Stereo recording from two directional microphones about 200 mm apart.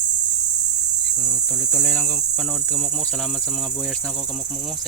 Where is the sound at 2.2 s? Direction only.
Centre (ahead or behind).